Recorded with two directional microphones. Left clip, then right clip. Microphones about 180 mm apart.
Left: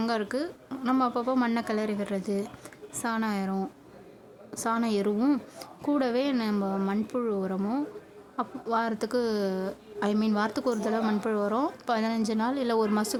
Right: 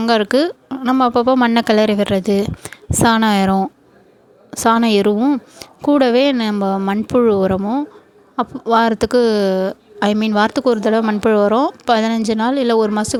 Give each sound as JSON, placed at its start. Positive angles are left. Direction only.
{"t": 0.0, "sound": "speech", "side_deg": -50}
{"t": 0.7, "sound": "speech", "side_deg": -40}
{"t": 5.1, "sound": "speech", "side_deg": -30}
{"t": 5.5, "sound": "a woman's voice", "side_deg": -45}